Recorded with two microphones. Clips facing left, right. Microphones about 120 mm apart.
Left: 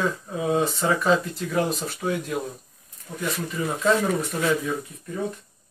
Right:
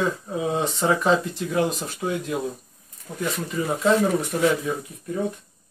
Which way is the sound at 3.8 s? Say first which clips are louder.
Right 2 dB; 15° right (ahead or behind).